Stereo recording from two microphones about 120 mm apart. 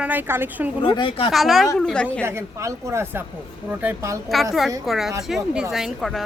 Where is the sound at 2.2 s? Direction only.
20° right (ahead or behind).